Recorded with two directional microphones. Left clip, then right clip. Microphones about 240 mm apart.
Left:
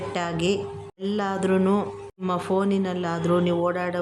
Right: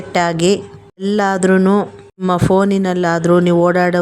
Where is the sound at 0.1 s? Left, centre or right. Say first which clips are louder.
Right 12 dB; right.